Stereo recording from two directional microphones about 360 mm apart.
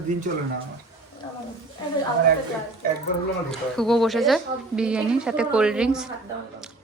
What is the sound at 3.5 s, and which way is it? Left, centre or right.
Speech, centre.